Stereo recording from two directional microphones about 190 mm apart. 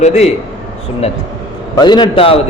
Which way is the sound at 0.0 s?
35° left (ahead or behind).